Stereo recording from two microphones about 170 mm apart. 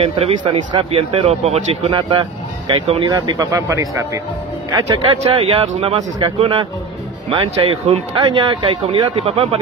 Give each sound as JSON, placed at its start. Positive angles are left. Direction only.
{"t": 0.0, "sound": "speech", "side_deg": -30}
{"t": 5.2, "sound": "speech", "side_deg": -35}